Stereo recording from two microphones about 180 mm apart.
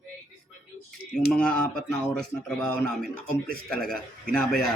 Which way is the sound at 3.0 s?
55° right (ahead or behind).